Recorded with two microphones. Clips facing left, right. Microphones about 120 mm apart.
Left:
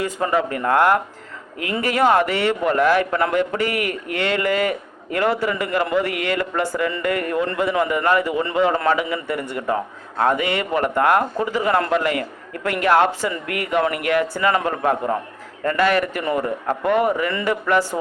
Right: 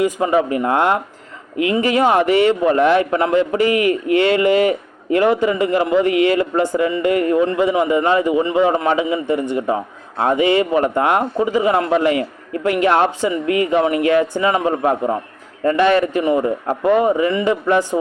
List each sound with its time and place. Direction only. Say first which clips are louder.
0.0 s a man's voice: right 5 dB; 15° right (ahead or behind)